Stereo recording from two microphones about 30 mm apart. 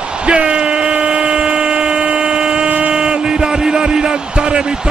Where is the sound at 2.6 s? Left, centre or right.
Right.